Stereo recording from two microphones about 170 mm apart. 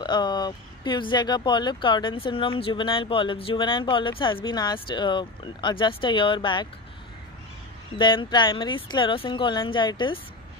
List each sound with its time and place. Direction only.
0.0 s speech: 25° left (ahead or behind)
8.0 s speech: 25° left (ahead or behind)